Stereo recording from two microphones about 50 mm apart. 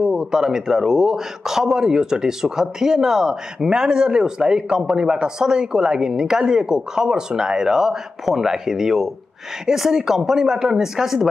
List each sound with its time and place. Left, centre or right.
0.0 s a man's voice: centre